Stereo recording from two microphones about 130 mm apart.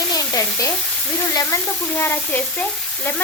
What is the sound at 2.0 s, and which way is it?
Speech, 15° left (ahead or behind).